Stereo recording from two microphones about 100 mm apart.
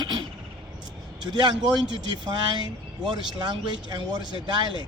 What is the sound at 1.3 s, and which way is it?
Speech, 50° right (ahead or behind).